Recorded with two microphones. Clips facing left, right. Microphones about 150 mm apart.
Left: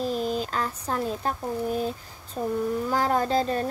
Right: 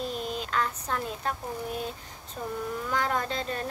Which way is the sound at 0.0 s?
40° left (ahead or behind).